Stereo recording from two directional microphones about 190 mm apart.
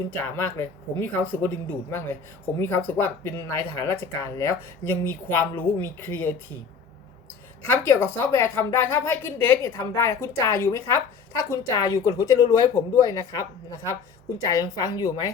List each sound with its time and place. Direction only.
0.3 s speech: 10° left (ahead or behind)
7.6 s speech: 10° left (ahead or behind)